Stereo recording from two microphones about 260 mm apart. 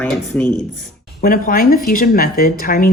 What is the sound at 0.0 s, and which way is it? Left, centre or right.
Speech, centre.